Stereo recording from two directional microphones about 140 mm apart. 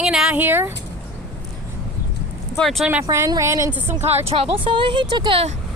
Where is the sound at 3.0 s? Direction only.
20° right (ahead or behind).